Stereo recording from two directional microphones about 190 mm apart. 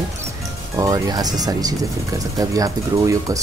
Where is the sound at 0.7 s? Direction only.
20° right (ahead or behind).